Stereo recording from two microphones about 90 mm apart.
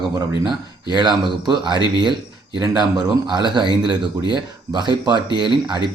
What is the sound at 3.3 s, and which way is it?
A man's voice, 60° right (ahead or behind).